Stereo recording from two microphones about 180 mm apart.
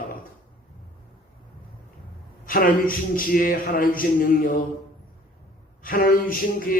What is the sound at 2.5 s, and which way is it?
A man's voice, 50° left (ahead or behind).